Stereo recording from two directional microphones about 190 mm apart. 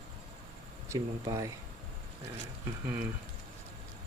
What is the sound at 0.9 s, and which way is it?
Speech, 15° right (ahead or behind).